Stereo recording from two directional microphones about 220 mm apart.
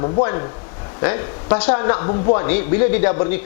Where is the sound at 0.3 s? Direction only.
20° left (ahead or behind).